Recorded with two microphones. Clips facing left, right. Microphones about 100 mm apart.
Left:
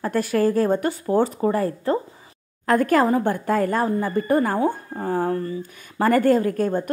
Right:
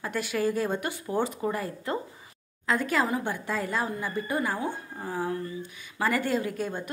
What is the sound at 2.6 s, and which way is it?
A woman's voice, 50° left (ahead or behind).